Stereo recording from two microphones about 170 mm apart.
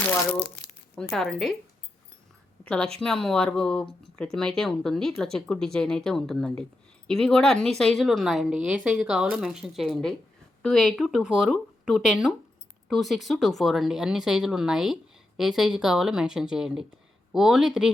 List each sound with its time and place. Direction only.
0.3 s speech: 70° left (ahead or behind)
1.1 s speech: centre (ahead or behind)
2.6 s a woman's voice: 5° left (ahead or behind)